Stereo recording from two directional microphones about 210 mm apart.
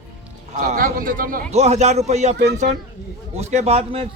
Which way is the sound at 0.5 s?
40° right (ahead or behind).